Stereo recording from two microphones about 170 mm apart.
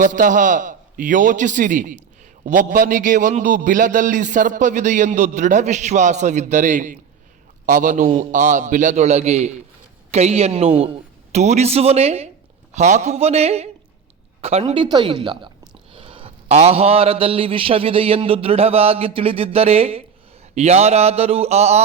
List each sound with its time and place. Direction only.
0.0 s a man's voice: 50° right (ahead or behind)